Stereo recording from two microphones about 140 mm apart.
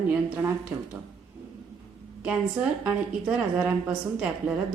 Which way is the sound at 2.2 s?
10° right (ahead or behind).